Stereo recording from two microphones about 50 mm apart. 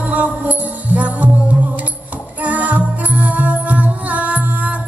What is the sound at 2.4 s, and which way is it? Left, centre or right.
Music, right.